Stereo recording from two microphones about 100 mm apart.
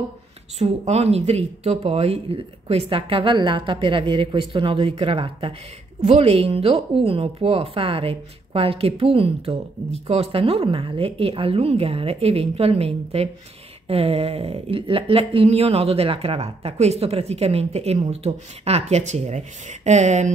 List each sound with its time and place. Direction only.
0.6 s speech: 90° right; by 5.5 s 65° right (ahead or behind)
6.0 s a woman's voice: 90° right
13.8 s a woman's voice: 75° right (ahead or behind)